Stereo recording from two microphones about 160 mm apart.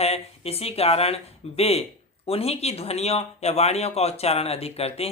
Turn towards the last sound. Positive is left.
turn(degrees=40)  # may be behind; listen again after turning